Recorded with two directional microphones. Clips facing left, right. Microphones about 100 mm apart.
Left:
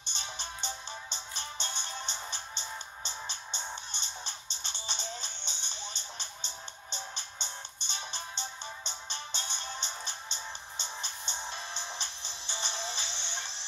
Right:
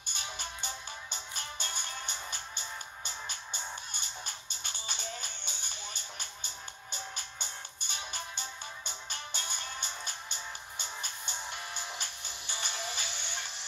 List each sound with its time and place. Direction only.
0.1 s music: 25° left (ahead or behind)